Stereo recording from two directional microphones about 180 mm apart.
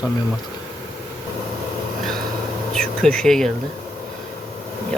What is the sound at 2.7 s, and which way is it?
Speech, 5° left (ahead or behind).